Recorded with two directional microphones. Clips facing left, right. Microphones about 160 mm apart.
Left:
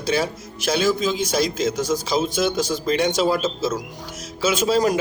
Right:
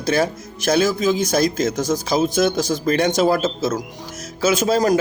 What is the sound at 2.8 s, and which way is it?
Speech, 50° right (ahead or behind).